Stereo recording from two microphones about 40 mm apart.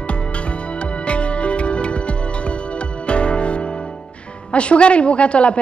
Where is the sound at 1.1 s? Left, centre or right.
Left.